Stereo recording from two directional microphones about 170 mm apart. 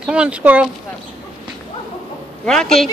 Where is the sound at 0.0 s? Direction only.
5° right (ahead or behind).